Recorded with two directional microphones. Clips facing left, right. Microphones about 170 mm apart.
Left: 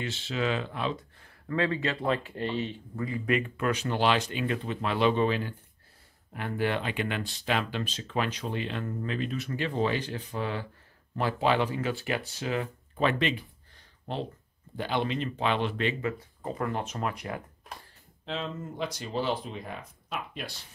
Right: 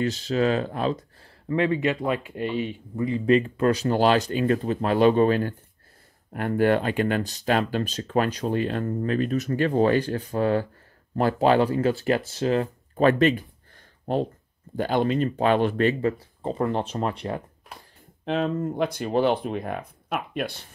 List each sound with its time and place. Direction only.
0.0 s speech: 40° right (ahead or behind)
1.5 s speech: 20° right (ahead or behind)
3.1 s speech: 30° right (ahead or behind)
18.2 s speech: 55° right (ahead or behind)